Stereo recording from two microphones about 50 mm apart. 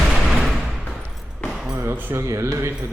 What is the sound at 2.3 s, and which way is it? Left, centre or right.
Speech, right.